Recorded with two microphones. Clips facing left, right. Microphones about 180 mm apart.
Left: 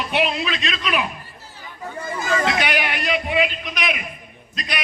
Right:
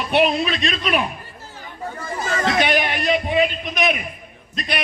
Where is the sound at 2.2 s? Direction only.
40° right (ahead or behind).